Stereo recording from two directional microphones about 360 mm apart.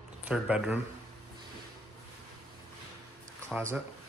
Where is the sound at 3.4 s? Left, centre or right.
Centre.